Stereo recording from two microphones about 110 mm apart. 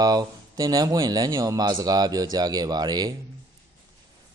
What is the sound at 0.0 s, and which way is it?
Speech, 35° right (ahead or behind).